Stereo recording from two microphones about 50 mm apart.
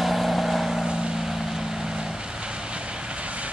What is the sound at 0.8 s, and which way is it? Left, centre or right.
Vehicle, centre.